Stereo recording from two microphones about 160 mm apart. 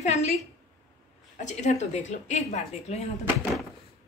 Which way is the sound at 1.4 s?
45° left (ahead or behind).